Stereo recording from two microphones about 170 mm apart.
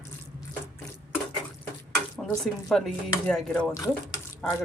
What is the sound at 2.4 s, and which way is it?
Speech, centre (ahead or behind).